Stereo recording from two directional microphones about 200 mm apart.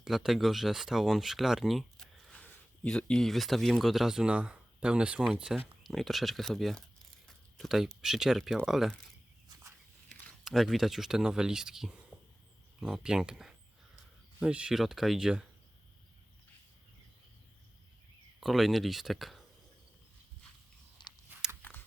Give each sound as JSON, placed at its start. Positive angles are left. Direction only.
{"t": 0.0, "sound": "speech", "side_deg": 0}
{"t": 10.2, "sound": "speech", "side_deg": 0}
{"t": 18.3, "sound": "speech", "side_deg": 0}
{"t": 21.0, "sound": "a sound", "side_deg": 25}
{"t": 21.6, "sound": "clip-clop", "side_deg": 10}